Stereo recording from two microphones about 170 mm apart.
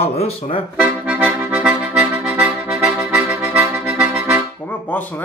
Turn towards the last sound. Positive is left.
turn(degrees=10)  # may be behind; listen again after turning